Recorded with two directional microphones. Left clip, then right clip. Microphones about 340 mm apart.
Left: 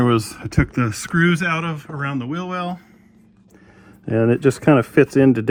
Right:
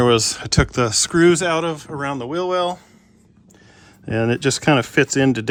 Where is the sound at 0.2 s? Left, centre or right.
Centre.